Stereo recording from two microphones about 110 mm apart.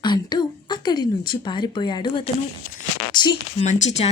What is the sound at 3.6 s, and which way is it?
Speech, 90° left.